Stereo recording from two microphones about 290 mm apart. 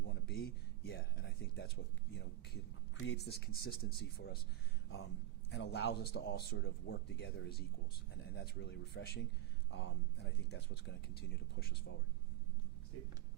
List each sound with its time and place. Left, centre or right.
0.1 s a sound: left
3.1 s speech: left
5.5 s speech: left